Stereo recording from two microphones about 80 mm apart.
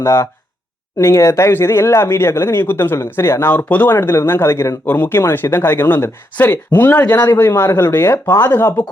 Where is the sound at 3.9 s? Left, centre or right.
Left.